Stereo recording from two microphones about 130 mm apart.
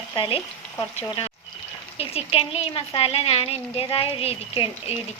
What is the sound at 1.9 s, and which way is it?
Speech, 50° left (ahead or behind).